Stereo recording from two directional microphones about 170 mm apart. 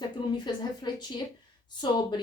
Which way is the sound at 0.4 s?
25° left (ahead or behind).